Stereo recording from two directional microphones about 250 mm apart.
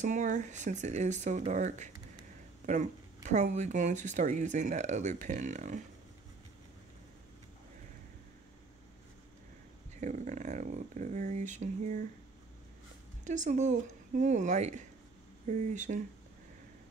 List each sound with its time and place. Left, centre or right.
0.0 s speech: right
9.9 s speech: right
13.2 s speech: right